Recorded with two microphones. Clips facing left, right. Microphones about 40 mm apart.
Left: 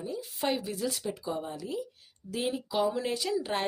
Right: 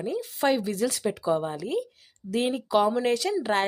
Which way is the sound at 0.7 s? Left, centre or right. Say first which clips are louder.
Right 6 dB; right.